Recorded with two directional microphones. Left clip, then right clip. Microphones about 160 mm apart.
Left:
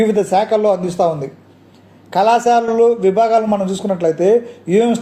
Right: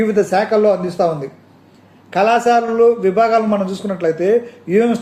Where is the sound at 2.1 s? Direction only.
35° left (ahead or behind).